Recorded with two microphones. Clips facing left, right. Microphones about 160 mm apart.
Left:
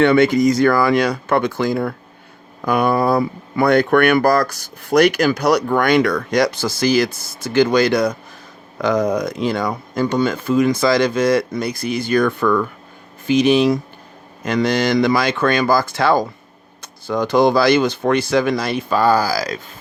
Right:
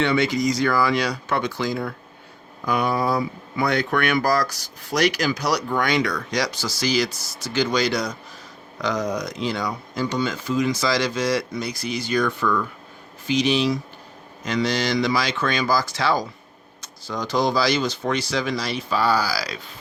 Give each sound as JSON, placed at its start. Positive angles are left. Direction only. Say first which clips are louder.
{"t": 0.0, "sound": "speech", "louder": "left 8 dB", "side_deg": 55}